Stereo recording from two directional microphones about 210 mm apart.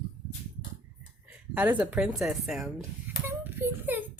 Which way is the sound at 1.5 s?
5° right (ahead or behind).